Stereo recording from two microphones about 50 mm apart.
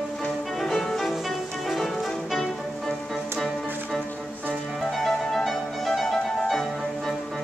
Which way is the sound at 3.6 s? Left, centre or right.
Right.